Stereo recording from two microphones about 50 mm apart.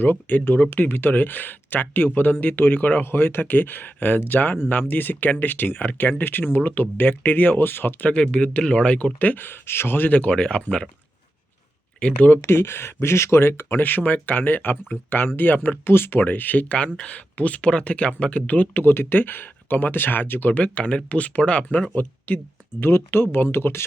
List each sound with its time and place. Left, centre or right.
0.0 s speech: left
8.2 s speech: left
9.1 s speech: left
10.2 s speech: left
12.1 s speech: left
12.4 s speech: left
15.8 s speech: left
20.5 s speech: left
22.3 s speech: left
22.8 s speech: left